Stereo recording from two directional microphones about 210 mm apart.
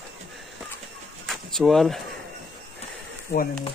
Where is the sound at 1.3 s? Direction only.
Centre (ahead or behind).